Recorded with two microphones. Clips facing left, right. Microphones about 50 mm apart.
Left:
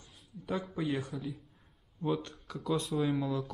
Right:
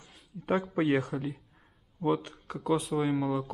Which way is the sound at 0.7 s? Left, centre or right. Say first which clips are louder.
Right 7 dB; right.